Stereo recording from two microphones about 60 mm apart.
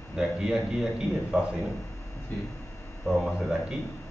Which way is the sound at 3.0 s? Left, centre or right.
Centre.